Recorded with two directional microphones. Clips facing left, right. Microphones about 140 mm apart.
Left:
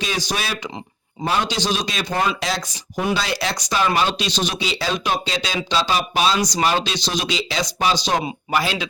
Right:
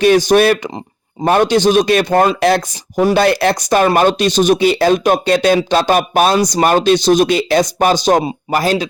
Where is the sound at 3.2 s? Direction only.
55° right (ahead or behind).